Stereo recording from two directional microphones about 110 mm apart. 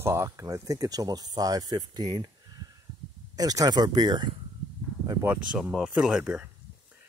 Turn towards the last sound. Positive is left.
turn(degrees=-10)  # may be behind; listen again after turning